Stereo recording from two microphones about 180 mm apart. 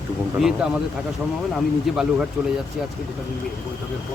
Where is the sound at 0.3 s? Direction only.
5° right (ahead or behind).